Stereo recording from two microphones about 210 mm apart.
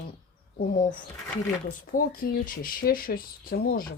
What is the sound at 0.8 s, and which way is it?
Speech, 40° left (ahead or behind).